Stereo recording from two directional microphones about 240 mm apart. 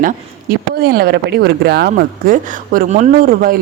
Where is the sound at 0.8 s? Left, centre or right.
Right.